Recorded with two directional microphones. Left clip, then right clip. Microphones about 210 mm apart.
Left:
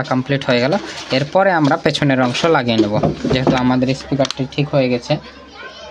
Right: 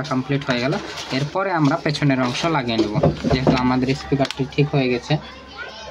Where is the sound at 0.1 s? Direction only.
45° left (ahead or behind).